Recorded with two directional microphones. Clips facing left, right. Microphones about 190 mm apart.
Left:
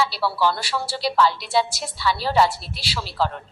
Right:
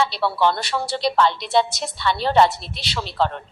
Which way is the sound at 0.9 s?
5° left (ahead or behind).